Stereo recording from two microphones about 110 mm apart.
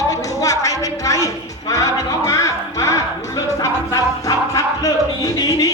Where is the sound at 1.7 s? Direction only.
30° left (ahead or behind).